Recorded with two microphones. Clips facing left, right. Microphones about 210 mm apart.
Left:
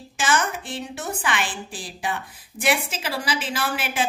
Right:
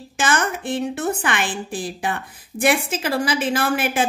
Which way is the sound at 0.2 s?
55° right (ahead or behind).